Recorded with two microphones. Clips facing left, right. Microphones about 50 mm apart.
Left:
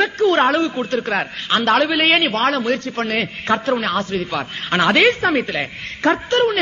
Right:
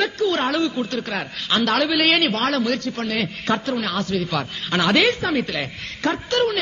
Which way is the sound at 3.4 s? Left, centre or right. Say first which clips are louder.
Left 5 dB; left.